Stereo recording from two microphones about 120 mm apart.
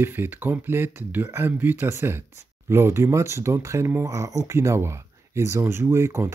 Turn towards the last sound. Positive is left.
turn(degrees=-20)  # may be behind; listen again after turning